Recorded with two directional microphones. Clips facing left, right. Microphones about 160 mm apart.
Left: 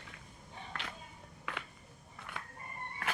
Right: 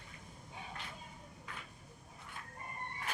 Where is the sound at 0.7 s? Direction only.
85° left.